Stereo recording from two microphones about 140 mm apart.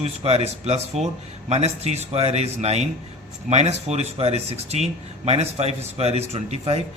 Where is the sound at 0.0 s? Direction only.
50° right (ahead or behind).